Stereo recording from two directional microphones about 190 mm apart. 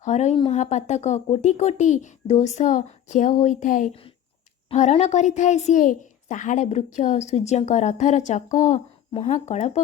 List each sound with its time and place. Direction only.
0.0 s a woman's voice: 35° left (ahead or behind)